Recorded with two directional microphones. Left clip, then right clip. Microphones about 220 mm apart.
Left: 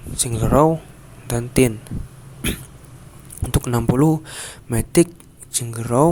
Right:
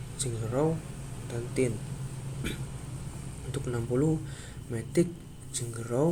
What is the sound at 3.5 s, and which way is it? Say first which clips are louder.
Speech: left 11 dB; 50° left (ahead or behind).